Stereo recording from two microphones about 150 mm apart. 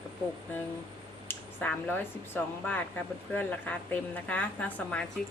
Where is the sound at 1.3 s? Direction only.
15° left (ahead or behind).